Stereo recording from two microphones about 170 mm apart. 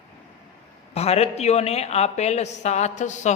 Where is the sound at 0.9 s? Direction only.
40° left (ahead or behind).